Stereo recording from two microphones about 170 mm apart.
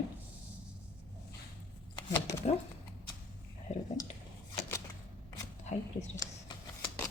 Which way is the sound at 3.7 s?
40° left (ahead or behind).